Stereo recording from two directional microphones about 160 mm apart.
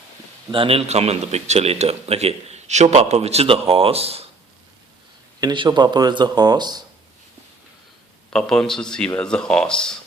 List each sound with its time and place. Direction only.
0.5 s speech: 35° right (ahead or behind)
5.4 s speech: 25° right (ahead or behind)
8.3 s speech: 5° left (ahead or behind)